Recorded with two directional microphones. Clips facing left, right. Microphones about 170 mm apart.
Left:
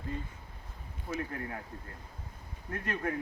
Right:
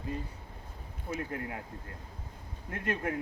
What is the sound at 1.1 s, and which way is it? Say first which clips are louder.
Speech: even; 20° right (ahead or behind).